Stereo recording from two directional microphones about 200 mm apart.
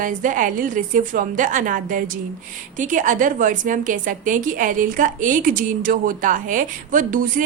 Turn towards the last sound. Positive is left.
turn(degrees=-40)  # may be behind; listen again after turning